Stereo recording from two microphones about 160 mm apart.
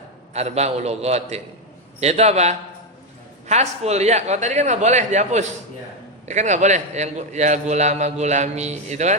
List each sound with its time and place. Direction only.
0.3 s a man's voice: 40° right (ahead or behind)